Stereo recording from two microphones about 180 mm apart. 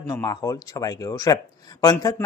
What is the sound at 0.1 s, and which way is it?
Speech, 20° left (ahead or behind).